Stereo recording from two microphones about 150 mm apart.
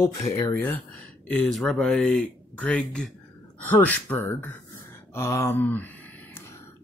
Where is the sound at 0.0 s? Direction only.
15° left (ahead or behind).